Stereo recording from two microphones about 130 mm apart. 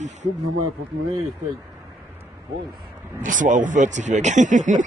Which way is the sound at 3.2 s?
85° right.